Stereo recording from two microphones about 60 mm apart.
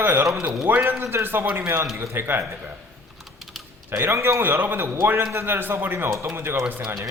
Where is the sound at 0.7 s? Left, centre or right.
Right.